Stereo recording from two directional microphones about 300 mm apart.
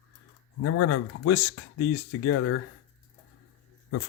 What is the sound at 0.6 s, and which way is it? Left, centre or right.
Speech, left.